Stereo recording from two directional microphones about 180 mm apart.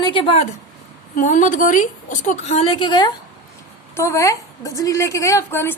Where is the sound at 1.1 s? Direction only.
45° left (ahead or behind).